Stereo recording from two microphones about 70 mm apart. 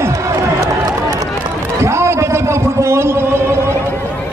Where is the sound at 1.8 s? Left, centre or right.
Right.